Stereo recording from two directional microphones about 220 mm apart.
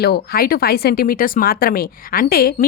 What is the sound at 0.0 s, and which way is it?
Speech, 45° left (ahead or behind).